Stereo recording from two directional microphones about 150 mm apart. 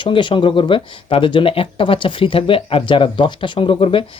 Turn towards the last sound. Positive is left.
turn(degrees=35)  # may be behind; listen again after turning